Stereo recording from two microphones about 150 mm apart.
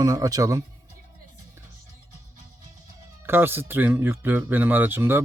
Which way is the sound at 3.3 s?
15° right (ahead or behind).